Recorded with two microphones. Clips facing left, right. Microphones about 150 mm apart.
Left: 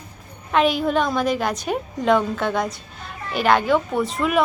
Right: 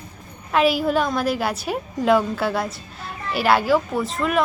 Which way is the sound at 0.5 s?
5° right (ahead or behind).